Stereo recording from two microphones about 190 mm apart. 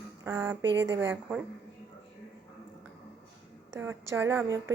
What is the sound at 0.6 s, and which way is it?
Speech, 70° right (ahead or behind).